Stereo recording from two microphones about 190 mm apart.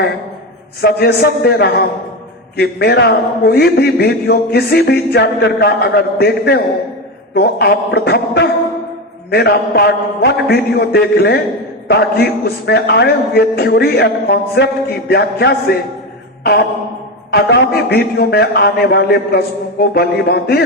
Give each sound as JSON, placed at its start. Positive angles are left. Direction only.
{"t": 0.8, "sound": "a man's voice", "side_deg": 55}
{"t": 16.4, "sound": "a sound", "side_deg": 55}
{"t": 17.3, "sound": "a man's voice", "side_deg": 55}